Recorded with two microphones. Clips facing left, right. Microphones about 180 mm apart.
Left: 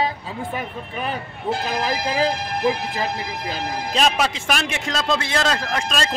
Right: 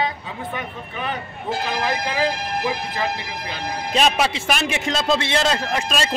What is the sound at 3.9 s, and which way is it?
A man's voice, 5° right (ahead or behind).